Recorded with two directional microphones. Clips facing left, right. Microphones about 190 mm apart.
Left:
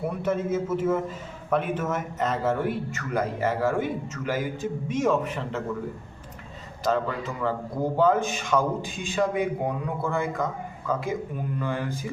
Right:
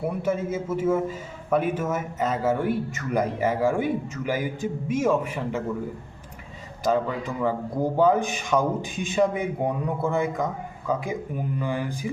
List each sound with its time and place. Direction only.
0.2 s a man's voice: 10° right (ahead or behind)
6.8 s a man's voice: 15° right (ahead or behind)